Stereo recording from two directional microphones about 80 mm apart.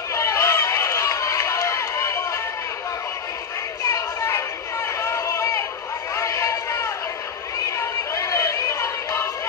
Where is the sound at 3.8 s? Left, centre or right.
Left.